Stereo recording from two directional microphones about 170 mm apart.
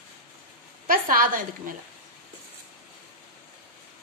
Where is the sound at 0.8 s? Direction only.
55° right (ahead or behind).